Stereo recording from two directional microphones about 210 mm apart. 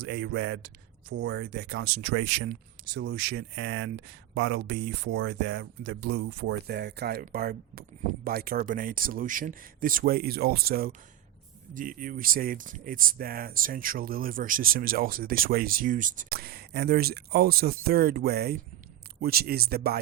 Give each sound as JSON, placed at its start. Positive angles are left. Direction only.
{"t": 0.0, "sound": "speech", "side_deg": -55}